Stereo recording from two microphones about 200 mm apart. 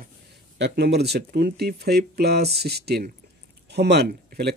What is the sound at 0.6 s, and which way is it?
Speech, 55° right (ahead or behind).